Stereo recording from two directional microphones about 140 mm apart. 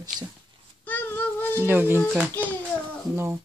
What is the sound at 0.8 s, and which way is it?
Child singing, 15° left (ahead or behind).